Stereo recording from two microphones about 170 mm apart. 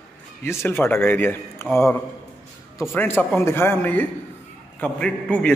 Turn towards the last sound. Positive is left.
turn(degrees=5)  # may be behind; listen again after turning